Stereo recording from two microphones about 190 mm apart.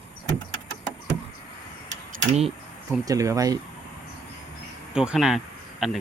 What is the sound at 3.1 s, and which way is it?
Speech, 15° right (ahead or behind).